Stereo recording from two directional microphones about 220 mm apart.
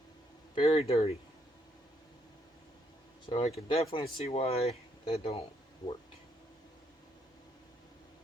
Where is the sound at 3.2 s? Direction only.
25° left (ahead or behind).